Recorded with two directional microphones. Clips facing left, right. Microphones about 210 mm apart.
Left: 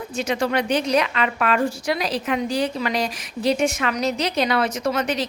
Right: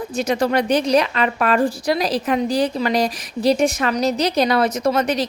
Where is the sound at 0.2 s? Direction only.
40° right (ahead or behind).